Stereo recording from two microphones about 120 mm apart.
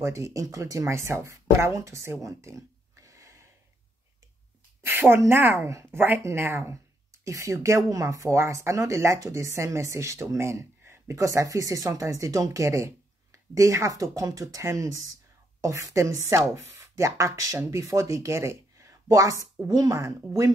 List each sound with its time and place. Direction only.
0.0 s a woman's voice: 25° right (ahead or behind)
2.2 s a sound: 25° right (ahead or behind)
4.8 s a woman's voice: 20° right (ahead or behind)